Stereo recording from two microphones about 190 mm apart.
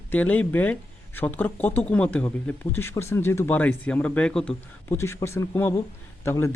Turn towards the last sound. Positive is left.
turn(degrees=15)  # may be behind; listen again after turning